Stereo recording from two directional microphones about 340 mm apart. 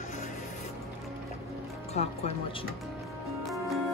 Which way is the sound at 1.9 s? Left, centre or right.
Centre.